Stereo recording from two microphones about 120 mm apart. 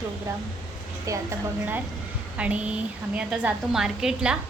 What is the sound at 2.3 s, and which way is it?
A woman's voice, 10° right (ahead or behind).